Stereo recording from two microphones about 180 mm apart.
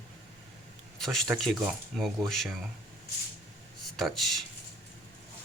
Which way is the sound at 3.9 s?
Centre (ahead or behind).